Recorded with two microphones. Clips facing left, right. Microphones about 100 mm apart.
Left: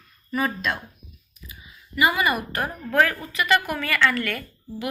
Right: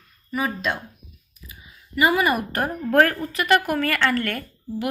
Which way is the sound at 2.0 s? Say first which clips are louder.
Right 2 dB; 45° right (ahead or behind).